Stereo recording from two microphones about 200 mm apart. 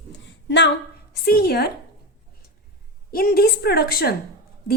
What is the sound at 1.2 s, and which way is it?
Speech, 50° left (ahead or behind).